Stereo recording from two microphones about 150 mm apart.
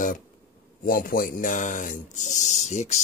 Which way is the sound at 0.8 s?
70° left (ahead or behind).